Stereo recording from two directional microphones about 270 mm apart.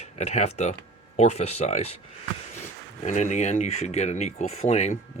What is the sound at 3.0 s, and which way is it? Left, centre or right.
Speech, left.